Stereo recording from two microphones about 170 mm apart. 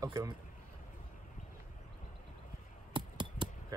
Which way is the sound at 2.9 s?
30° right (ahead or behind).